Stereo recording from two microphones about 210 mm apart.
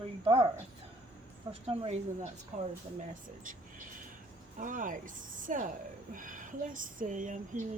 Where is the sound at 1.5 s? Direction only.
30° right (ahead or behind).